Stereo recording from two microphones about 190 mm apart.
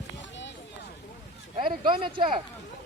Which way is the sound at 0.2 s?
70° left (ahead or behind).